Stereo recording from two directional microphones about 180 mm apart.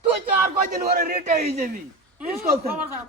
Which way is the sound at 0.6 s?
50° right (ahead or behind).